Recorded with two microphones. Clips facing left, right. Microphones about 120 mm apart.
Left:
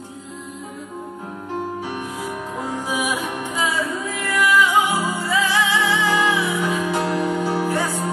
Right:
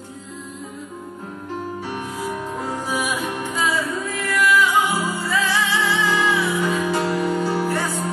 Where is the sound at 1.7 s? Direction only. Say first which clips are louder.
Even; 15° left (ahead or behind).